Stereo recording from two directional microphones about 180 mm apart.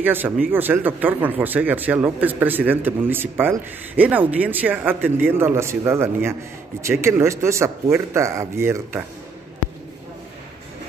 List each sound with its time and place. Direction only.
0.0 s speech: 10° right (ahead or behind)